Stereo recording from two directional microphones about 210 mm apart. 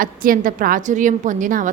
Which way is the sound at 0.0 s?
40° right (ahead or behind).